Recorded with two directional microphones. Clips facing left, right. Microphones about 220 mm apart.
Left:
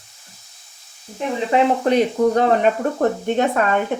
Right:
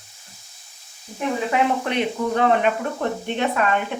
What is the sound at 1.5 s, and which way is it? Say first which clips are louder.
Speech: left 8 dB; 40° left (ahead or behind).